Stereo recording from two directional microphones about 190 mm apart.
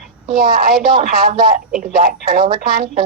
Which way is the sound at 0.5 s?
50° right (ahead or behind).